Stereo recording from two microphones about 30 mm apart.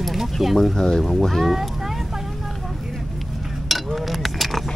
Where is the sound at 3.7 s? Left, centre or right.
Centre.